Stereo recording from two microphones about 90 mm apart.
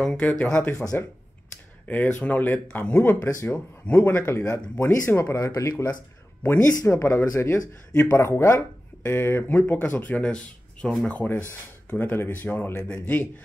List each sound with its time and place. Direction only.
0.0 s speech: 15° left (ahead or behind)
1.9 s speech: 20° left (ahead or behind)